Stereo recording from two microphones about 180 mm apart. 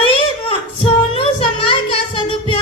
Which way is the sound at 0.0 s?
30° left (ahead or behind).